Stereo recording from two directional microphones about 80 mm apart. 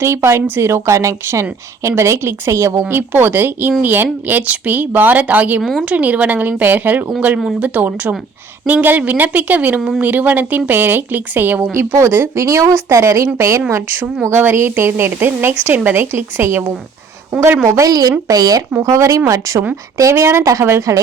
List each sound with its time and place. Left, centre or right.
0.0 s a woman's voice: right
2.9 s speech: right
11.7 s a woman's voice: right